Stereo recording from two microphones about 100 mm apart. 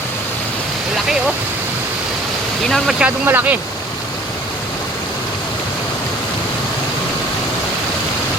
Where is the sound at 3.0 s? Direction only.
20° right (ahead or behind).